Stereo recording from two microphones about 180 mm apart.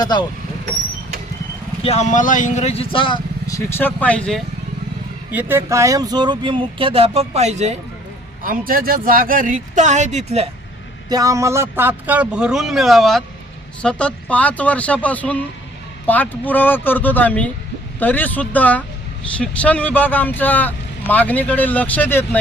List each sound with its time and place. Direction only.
0.0 s speech: 25° left (ahead or behind)
1.8 s speech: 40° left (ahead or behind); by 4.4 s 5° left (ahead or behind)
5.3 s speech: 10° right (ahead or behind); by 7.8 s 40° right (ahead or behind)
8.4 s speech: 55° right (ahead or behind); by 10.5 s 35° right (ahead or behind)
11.1 s a man's voice: 20° right (ahead or behind); by 22.4 s 10° left (ahead or behind)